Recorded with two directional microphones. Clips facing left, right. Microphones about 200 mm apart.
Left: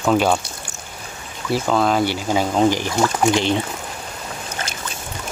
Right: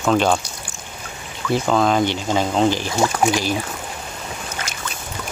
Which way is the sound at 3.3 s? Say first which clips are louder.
Left 3 dB; 25° left (ahead or behind).